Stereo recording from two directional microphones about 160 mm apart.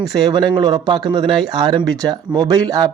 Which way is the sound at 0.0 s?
25° right (ahead or behind).